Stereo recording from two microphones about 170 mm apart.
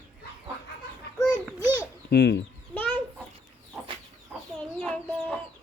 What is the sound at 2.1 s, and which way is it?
Speech, 85° left.